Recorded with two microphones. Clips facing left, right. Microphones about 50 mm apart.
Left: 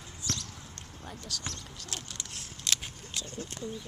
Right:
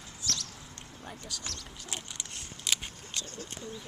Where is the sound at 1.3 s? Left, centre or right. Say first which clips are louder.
Left 2 dB; centre.